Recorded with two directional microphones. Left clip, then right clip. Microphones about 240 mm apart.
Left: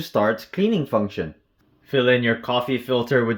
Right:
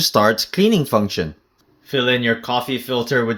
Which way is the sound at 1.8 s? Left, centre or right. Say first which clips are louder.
Right 1 dB; centre.